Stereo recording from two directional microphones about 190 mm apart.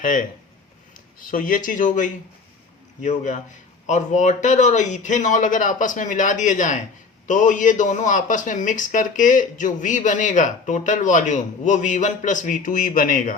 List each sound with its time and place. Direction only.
0.0 s speech: 45° left (ahead or behind)
1.3 s a man's voice: 45° left (ahead or behind)